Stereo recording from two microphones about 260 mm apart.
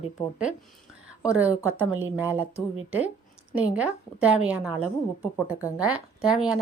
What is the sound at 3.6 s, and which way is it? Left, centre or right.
A woman's voice, centre.